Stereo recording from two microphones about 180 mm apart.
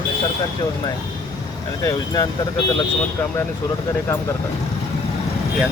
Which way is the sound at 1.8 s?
20° left (ahead or behind).